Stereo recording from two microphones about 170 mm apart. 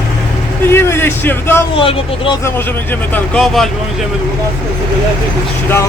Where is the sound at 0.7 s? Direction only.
15° left (ahead or behind).